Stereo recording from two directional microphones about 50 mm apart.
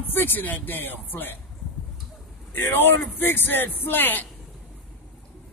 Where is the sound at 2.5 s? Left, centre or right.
Left.